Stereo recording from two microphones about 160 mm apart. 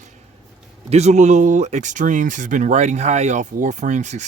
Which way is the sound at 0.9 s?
45° right (ahead or behind).